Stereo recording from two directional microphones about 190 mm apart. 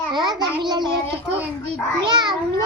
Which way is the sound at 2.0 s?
25° right (ahead or behind).